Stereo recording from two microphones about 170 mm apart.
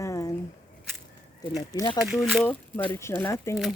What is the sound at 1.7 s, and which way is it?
Speech, 25° left (ahead or behind).